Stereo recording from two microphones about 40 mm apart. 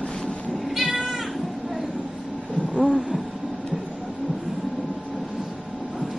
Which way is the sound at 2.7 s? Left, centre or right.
Centre.